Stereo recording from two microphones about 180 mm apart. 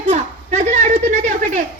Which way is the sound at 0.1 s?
40° right (ahead or behind).